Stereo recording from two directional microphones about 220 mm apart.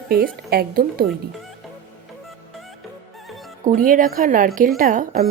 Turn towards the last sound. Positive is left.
turn(degrees=-40)  # may be behind; listen again after turning